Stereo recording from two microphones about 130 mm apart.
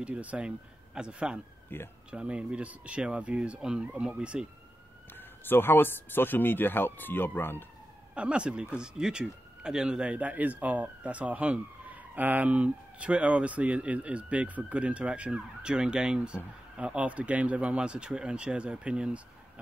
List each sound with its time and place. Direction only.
0.0 s speech: 10° right (ahead or behind)
1.7 s speech: 15° left (ahead or behind)
2.0 s speech: 10° right (ahead or behind)
5.1 s speech: 15° left (ahead or behind)
8.1 s speech: 10° right (ahead or behind)